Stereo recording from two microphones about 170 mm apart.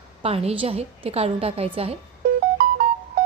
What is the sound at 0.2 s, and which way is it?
A woman's voice, 35° right (ahead or behind).